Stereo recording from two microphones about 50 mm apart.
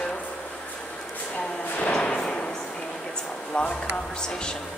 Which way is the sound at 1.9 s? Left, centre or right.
Centre.